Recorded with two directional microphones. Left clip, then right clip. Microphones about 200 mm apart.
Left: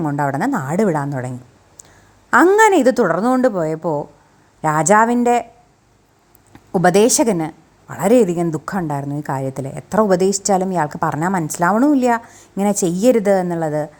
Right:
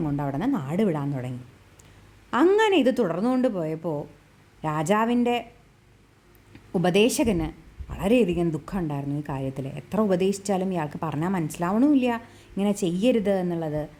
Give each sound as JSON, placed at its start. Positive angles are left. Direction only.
{"t": 0.0, "sound": "a woman's voice", "side_deg": 15}
{"t": 2.3, "sound": "a woman's voice", "side_deg": 15}
{"t": 6.7, "sound": "a woman's voice", "side_deg": 15}